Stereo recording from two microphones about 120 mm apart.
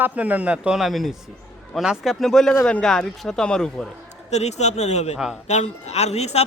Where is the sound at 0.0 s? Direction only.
10° right (ahead or behind); by 3.8 s 5° left (ahead or behind).